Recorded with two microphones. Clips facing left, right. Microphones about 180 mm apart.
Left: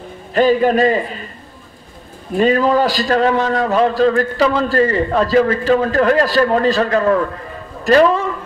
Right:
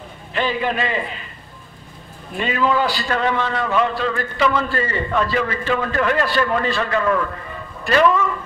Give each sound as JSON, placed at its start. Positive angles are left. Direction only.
{"t": 0.3, "sound": "a man's voice", "side_deg": 40}
{"t": 2.3, "sound": "a man's voice", "side_deg": 40}